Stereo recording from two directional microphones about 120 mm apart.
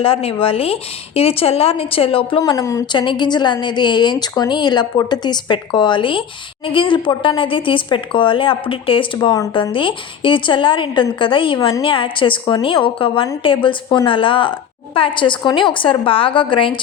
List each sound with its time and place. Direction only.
0.0 s a woman's voice: 55° left (ahead or behind)
2.4 s speech: 30° left (ahead or behind)
2.9 s a woman's voice: 40° left (ahead or behind)
9.1 s a woman's voice: 30° left (ahead or behind)